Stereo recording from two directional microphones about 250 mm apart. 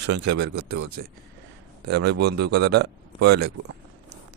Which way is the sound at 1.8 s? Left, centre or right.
Right.